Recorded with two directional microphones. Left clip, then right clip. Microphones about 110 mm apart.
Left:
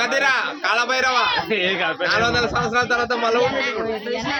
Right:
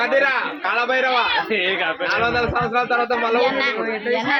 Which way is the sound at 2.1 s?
40° left (ahead or behind).